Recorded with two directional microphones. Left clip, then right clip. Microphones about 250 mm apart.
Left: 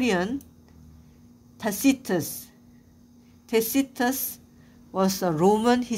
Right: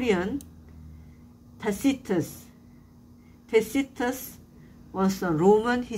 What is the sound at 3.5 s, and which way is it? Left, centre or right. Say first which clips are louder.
Speech: even; left.